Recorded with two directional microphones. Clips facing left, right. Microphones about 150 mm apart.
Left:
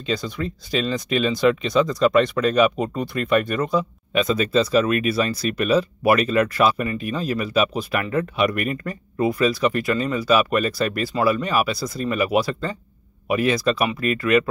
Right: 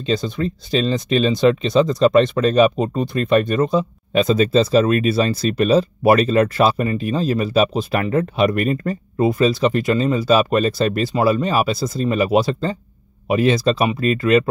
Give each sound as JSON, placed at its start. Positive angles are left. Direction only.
{"t": 0.0, "sound": "speech", "side_deg": -25}